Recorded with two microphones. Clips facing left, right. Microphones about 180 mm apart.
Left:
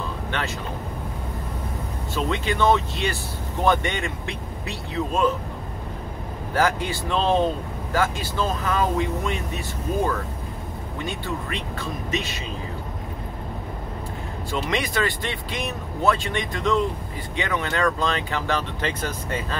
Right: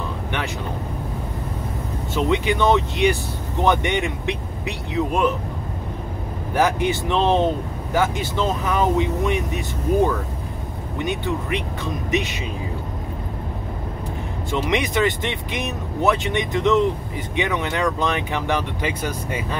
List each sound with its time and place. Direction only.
2.1 s speech: 15° right (ahead or behind)
6.5 s speech: 20° right (ahead or behind)
11.1 s speech: 20° right (ahead or behind)
14.5 s speech: 20° right (ahead or behind)